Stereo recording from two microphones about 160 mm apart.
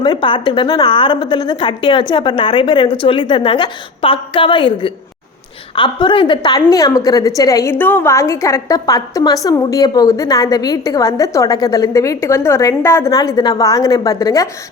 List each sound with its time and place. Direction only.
0.0 s a woman's voice: 30° left (ahead or behind)